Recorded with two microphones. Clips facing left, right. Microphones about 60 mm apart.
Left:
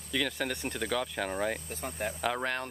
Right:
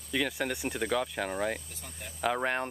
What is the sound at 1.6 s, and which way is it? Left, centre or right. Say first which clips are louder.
Speech: left 10 dB; left.